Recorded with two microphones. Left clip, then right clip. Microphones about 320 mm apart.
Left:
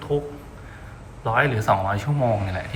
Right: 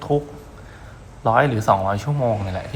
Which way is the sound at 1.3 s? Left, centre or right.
Centre.